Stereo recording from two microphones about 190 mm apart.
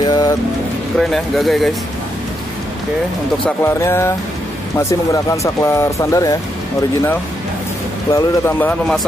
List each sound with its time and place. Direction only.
0.0 s music: 20° left (ahead or behind)
0.9 s speech: centre (ahead or behind)
3.4 s speech: 15° left (ahead or behind)
8.1 s speech: 10° left (ahead or behind)